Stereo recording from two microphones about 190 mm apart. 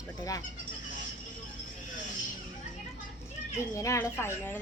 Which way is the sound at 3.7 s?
15° left (ahead or behind).